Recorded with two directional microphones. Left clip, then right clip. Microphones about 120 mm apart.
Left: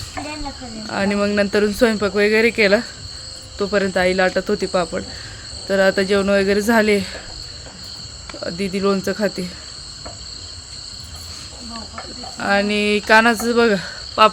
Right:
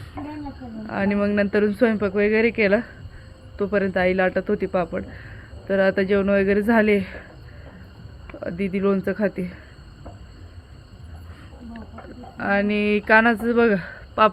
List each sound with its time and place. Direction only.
0.9 s speech: 20° left (ahead or behind)
8.4 s speech: 20° left (ahead or behind)
12.4 s speech: 15° left (ahead or behind)